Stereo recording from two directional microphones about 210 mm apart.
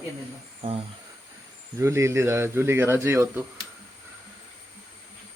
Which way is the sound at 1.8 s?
15° right (ahead or behind).